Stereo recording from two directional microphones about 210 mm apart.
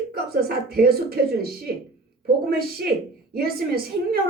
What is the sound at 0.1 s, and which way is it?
A woman's voice, 45° right (ahead or behind).